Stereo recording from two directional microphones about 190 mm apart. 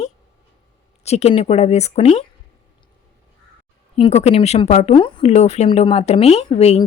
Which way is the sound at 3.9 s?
35° left (ahead or behind).